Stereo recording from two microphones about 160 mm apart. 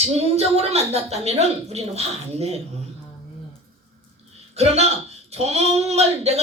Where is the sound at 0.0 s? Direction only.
40° right (ahead or behind).